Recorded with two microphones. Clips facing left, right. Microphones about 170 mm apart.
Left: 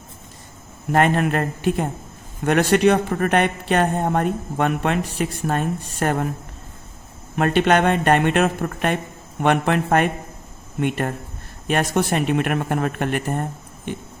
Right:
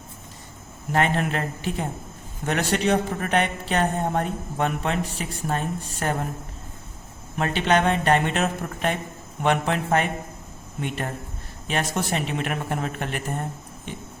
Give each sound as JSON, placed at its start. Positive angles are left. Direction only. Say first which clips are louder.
{"t": 0.9, "sound": "a man's voice", "louder": "left 5 dB", "side_deg": 50}
{"t": 7.3, "sound": "a man's voice", "louder": "left 5 dB", "side_deg": 55}